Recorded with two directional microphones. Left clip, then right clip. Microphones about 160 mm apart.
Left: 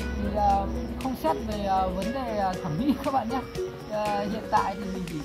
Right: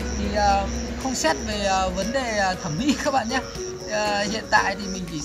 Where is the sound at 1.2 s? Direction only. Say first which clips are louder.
Right 4 dB; 10° right (ahead or behind).